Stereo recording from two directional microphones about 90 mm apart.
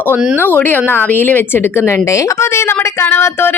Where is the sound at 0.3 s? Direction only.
20° left (ahead or behind).